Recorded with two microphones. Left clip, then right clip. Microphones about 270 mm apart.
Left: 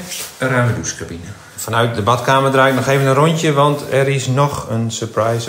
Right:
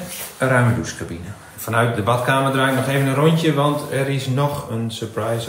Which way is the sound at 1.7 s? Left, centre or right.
Centre.